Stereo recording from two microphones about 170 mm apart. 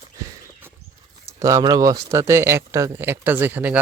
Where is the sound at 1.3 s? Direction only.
20° right (ahead or behind).